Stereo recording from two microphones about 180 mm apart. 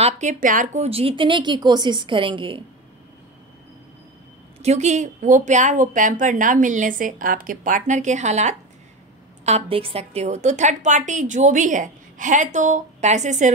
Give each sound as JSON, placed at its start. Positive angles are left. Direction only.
{"t": 0.0, "sound": "a woman's voice", "side_deg": -45}
{"t": 0.8, "sound": "a woman's voice", "side_deg": -30}
{"t": 4.6, "sound": "a woman's voice", "side_deg": -40}